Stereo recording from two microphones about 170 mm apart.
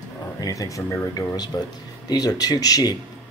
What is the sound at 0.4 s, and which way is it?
Speech, 20° left (ahead or behind).